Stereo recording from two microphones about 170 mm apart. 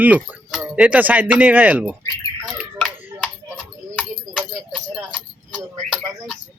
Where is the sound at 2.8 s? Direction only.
5° left (ahead or behind).